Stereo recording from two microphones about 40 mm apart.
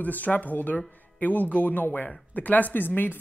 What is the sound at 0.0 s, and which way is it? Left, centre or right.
Speech, left.